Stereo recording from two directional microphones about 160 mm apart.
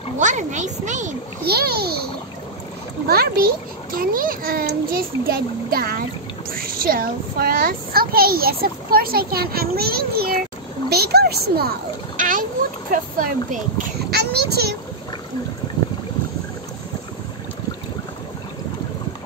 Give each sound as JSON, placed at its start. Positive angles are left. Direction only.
{"t": 0.2, "sound": "a child's voice", "side_deg": -50}
{"t": 1.4, "sound": "a child's voice", "side_deg": -75}
{"t": 3.1, "sound": "a child's voice", "side_deg": -70}
{"t": 10.9, "sound": "a child's voice", "side_deg": -80}
{"t": 12.2, "sound": "splash", "side_deg": -55}
{"t": 12.9, "sound": "speech", "side_deg": -55}
{"t": 14.1, "sound": "a child's voice", "side_deg": -90}